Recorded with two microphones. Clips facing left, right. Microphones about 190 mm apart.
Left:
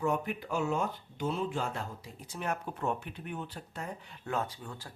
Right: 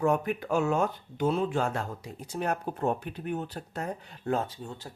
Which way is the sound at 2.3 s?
40° right (ahead or behind).